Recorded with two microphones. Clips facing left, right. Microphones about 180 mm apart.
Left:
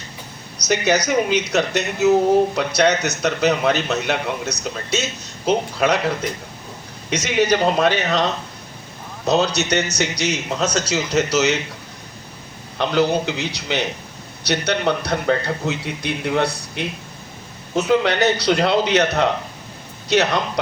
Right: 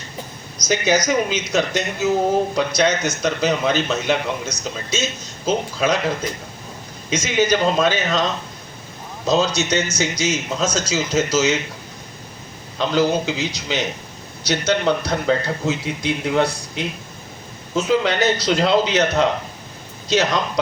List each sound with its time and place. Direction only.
0.7 s a man's voice: 65° left (ahead or behind)
7.1 s a man's voice: 65° left (ahead or behind)
12.7 s a man's voice: 65° left (ahead or behind)